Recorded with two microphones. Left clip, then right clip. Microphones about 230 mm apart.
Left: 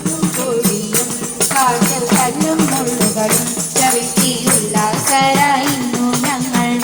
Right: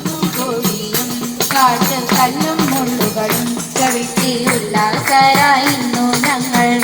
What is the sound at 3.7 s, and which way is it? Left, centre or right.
Music, right.